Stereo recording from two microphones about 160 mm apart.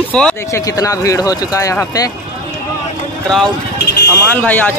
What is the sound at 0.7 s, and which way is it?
Speech, 20° left (ahead or behind).